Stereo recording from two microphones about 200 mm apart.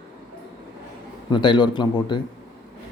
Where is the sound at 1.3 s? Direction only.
25° left (ahead or behind).